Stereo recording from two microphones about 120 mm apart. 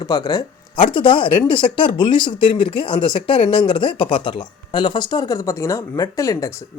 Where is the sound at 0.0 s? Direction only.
40° left (ahead or behind).